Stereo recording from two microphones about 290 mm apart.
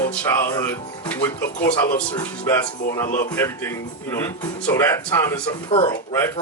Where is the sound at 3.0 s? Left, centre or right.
Left.